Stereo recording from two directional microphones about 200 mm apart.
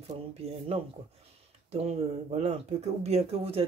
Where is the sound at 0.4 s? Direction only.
30° right (ahead or behind).